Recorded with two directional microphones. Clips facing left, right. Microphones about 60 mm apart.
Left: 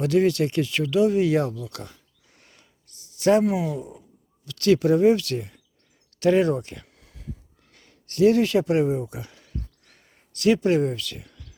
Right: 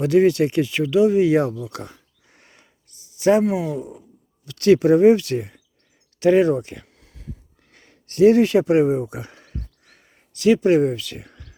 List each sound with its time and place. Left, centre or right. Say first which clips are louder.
0.0 s speech: right 4 dB; centre
4.4 s speech: right 4 dB; right
6.1 s speech: right 4 dB; centre
6.8 s a sound: right 1 dB; centre
7.7 s speech: right 1 dB; right
9.8 s a sound: right 3 dB; centre
10.3 s speech: right 3 dB; centre
10.6 s speech: right 5 dB; centre; by 11.5 s right